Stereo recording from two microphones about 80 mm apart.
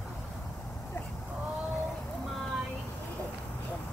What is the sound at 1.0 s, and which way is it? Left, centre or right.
Vehicle, left.